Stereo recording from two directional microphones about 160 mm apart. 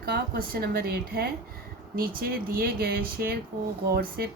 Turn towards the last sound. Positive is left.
turn(degrees=-75)  # may be behind; listen again after turning